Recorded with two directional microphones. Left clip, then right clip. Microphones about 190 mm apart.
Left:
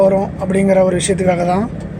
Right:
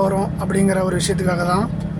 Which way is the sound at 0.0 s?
Centre (ahead or behind).